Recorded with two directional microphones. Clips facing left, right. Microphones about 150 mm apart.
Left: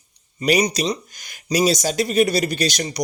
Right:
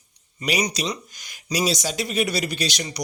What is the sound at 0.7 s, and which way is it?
Speech, 35° left (ahead or behind).